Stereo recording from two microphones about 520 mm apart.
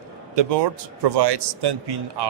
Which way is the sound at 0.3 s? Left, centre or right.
Right.